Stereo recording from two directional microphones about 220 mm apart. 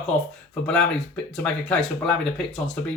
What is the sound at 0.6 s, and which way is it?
Speech, 5° left (ahead or behind).